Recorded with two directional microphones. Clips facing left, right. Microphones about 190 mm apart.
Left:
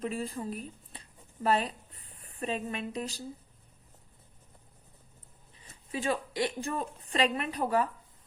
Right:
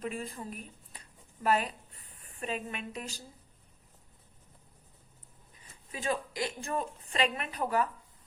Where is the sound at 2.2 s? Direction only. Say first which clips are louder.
Left 3 dB; 35° left (ahead or behind).